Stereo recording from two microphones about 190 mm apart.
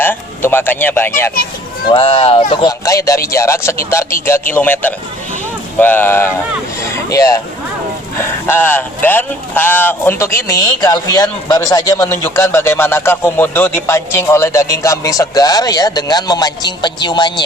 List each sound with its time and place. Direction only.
0.0 s a man's voice: 10° left (ahead or behind)
1.9 s speech: 30° left (ahead or behind)
2.8 s speech: 15° left (ahead or behind)